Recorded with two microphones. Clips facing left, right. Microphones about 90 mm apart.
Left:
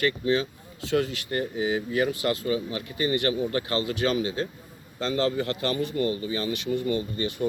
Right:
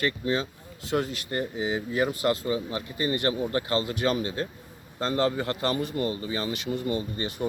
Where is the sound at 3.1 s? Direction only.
35° right (ahead or behind).